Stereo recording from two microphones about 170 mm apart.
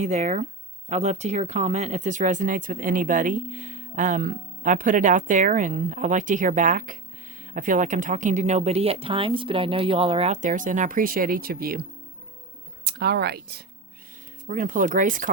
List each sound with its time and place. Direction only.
0.0 s speech: 45° right (ahead or behind); by 11.9 s 60° right (ahead or behind)
12.8 s speech: 70° right (ahead or behind)
14.4 s speech: 50° right (ahead or behind)